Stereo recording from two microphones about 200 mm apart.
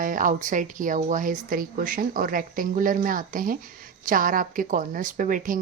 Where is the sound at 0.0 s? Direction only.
40° right (ahead or behind).